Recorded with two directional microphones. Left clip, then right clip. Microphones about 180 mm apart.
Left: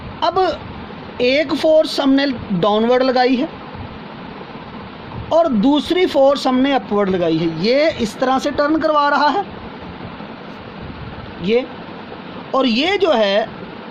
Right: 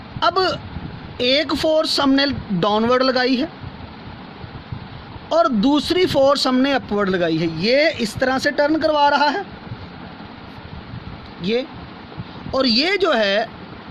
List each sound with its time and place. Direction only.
0.2 s speech: 40° right (ahead or behind)
5.3 s speech: 40° right (ahead or behind)
12.5 s speech: 35° right (ahead or behind)